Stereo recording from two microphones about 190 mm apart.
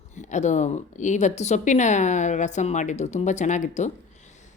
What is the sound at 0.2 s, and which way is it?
A woman's voice, 40° left (ahead or behind).